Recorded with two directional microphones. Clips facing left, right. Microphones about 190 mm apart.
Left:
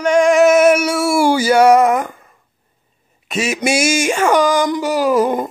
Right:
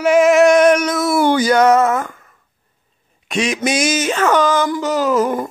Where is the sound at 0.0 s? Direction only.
5° right (ahead or behind); by 2.2 s 15° left (ahead or behind).